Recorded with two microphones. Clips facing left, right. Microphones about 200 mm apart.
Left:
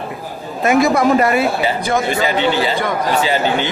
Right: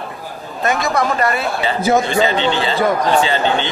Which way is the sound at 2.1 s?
30° right (ahead or behind).